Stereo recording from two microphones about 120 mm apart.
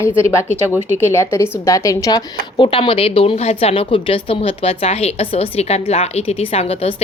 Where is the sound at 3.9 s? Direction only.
45° left (ahead or behind).